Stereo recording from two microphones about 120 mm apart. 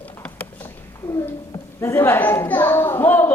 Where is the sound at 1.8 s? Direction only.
20° left (ahead or behind).